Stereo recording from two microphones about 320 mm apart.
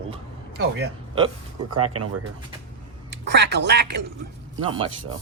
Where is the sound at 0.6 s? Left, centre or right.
Right.